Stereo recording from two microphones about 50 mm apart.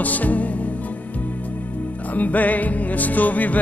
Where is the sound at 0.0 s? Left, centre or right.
Left.